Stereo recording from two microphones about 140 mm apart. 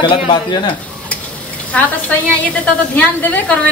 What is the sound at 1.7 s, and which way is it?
A woman's voice, 10° left (ahead or behind).